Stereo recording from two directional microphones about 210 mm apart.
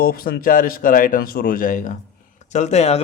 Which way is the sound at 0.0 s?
45° left (ahead or behind).